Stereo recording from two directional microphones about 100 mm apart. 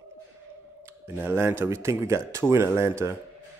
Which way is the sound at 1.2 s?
20° right (ahead or behind).